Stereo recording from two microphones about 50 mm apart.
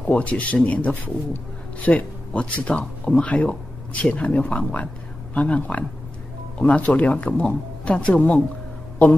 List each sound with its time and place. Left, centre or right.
0.0 s a man's voice: left